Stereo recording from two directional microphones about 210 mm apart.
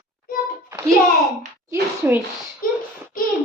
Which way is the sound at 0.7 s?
15° right (ahead or behind).